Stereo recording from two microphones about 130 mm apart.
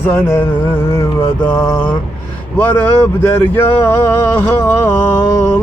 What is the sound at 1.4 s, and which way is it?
Speech, 20° left (ahead or behind).